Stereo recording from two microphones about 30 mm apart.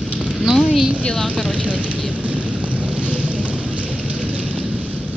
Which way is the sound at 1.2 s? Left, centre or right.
Left.